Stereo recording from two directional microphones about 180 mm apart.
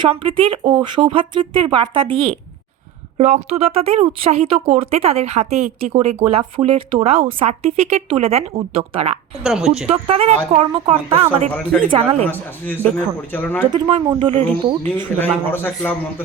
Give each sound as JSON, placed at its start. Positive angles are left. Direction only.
{"t": 0.0, "sound": "speech", "side_deg": -30}
{"t": 3.2, "sound": "speech", "side_deg": -40}
{"t": 9.4, "sound": "a woman's voice", "side_deg": 0}
{"t": 9.9, "sound": "speech", "side_deg": -35}
{"t": 11.4, "sound": "a man's voice", "side_deg": 10}
{"t": 13.7, "sound": "speech", "side_deg": -25}
{"t": 15.2, "sound": "a man's voice", "side_deg": 10}